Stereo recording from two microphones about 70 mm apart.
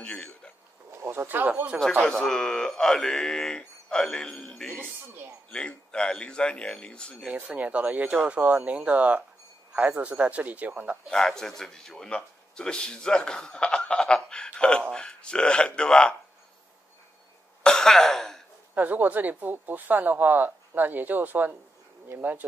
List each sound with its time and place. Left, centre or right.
0.0 s speech: centre
0.9 s speech: right
2.0 s speech: centre
4.7 s speech: right
5.5 s speech: centre
7.2 s speech: centre
11.1 s speech: centre
17.6 s cough: centre
18.8 s speech: right